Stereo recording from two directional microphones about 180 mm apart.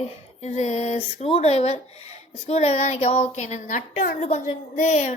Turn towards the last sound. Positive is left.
turn(degrees=40)  # may be behind; listen again after turning